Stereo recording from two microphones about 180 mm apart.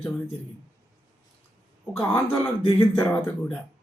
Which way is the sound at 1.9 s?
10° left (ahead or behind).